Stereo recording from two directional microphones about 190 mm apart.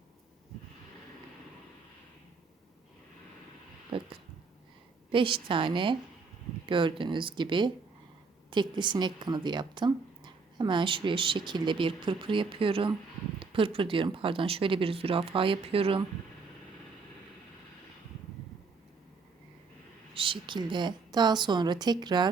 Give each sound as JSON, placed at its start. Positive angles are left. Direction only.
{"t": 5.1, "sound": "a woman's voice", "side_deg": -25}
{"t": 20.1, "sound": "a woman's voice", "side_deg": -25}